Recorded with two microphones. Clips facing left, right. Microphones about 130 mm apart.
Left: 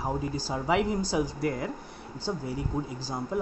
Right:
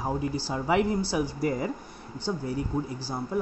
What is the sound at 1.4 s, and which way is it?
Speech, centre (ahead or behind).